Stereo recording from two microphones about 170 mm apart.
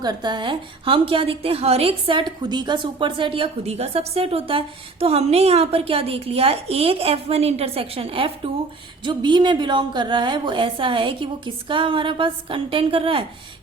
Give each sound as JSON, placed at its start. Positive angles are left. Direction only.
{"t": 0.0, "sound": "a woman's voice", "side_deg": -25}